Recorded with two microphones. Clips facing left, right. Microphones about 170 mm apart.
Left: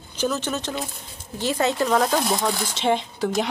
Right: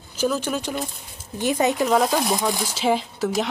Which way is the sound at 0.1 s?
10° right (ahead or behind).